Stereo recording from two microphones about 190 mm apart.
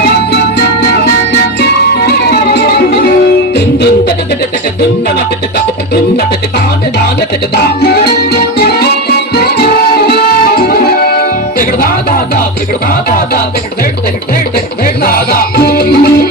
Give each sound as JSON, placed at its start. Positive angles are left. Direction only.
{"t": 1.6, "sound": "music", "side_deg": 55}
{"t": 7.5, "sound": "music", "side_deg": 60}
{"t": 13.1, "sound": "music", "side_deg": 45}
{"t": 15.0, "sound": "music", "side_deg": 50}